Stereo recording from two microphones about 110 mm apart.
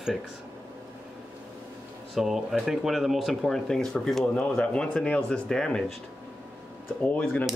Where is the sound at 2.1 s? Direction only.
Centre (ahead or behind).